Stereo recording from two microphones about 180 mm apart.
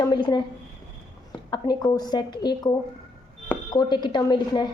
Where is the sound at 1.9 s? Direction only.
20° left (ahead or behind).